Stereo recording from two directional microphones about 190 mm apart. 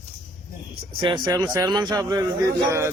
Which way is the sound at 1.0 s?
25° right (ahead or behind).